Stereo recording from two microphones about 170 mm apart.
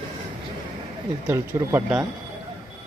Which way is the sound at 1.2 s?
15° right (ahead or behind).